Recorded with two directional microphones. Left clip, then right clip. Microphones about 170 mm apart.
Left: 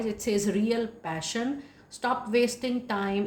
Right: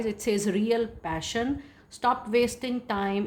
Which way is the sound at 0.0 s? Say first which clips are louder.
Right 1 dB; 45° right (ahead or behind).